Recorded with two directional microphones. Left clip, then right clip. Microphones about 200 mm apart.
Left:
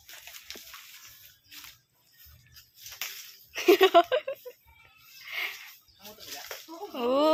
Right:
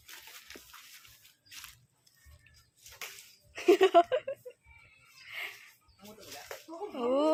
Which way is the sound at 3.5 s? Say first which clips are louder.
Left 3 dB; 30° left (ahead or behind).